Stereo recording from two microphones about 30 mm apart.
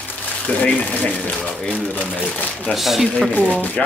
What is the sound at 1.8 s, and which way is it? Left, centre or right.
Speech, left.